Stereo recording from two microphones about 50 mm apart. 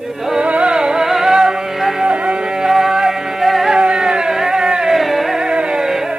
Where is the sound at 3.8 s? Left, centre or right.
Centre.